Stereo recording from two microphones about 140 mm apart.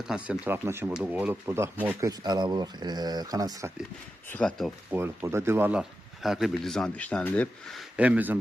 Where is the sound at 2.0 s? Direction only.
30° right (ahead or behind).